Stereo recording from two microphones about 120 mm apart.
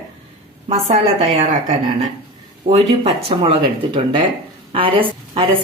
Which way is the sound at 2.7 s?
55° right (ahead or behind).